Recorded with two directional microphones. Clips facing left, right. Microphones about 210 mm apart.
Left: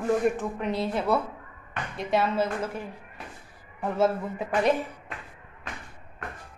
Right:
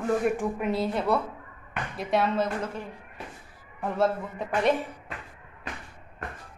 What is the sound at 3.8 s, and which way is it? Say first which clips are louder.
Speech: left 1 dB; centre (ahead or behind).